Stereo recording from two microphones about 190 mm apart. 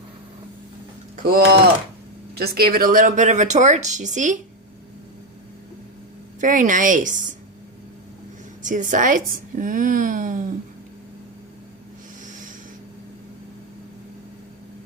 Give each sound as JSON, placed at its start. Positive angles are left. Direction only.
{"t": 1.1, "sound": "speech", "side_deg": -50}
{"t": 6.4, "sound": "a woman's voice", "side_deg": -45}
{"t": 8.6, "sound": "a woman's voice", "side_deg": -45}